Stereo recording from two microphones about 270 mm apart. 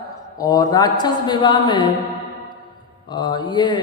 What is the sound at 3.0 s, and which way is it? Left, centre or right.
Speech, centre.